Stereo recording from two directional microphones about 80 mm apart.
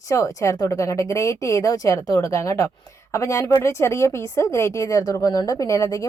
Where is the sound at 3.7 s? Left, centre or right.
Left.